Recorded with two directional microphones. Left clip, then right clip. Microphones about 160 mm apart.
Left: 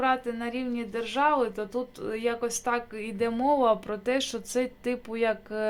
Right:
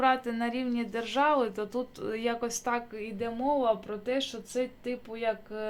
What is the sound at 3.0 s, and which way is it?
Speech, 25° left (ahead or behind).